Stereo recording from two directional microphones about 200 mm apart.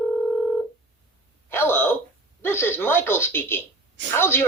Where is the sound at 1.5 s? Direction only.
10° left (ahead or behind).